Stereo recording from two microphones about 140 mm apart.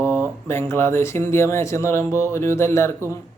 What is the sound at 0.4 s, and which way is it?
Speech, 20° left (ahead or behind).